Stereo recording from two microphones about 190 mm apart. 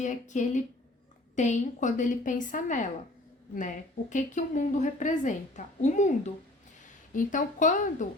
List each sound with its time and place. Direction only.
0.0 s a woman's voice: 40° left (ahead or behind)